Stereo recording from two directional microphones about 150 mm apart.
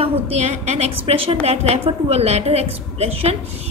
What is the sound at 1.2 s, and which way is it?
A woman's voice, 40° right (ahead or behind).